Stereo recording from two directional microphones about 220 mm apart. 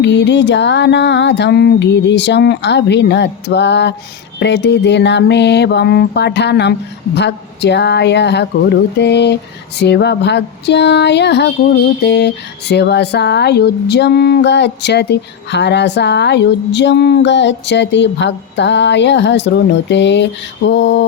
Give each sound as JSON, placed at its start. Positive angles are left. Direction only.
{"t": 0.0, "sound": "speech", "side_deg": 55}